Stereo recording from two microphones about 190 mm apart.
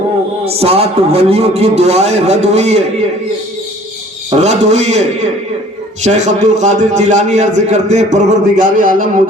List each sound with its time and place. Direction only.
0.4 s a man's voice: 30° right (ahead or behind)
4.3 s a man's voice: 35° right (ahead or behind)